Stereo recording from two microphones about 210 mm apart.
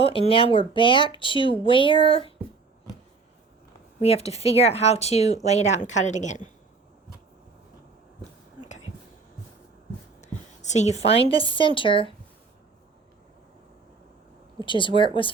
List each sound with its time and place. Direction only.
0.0 s speech: 25° left (ahead or behind)
4.0 s speech: 30° left (ahead or behind)
10.2 s a woman's voice: 35° left (ahead or behind)
14.6 s speech: 25° left (ahead or behind)